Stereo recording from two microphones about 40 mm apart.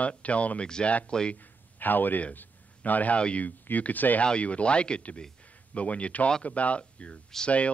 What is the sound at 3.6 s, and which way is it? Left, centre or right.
Speech, left.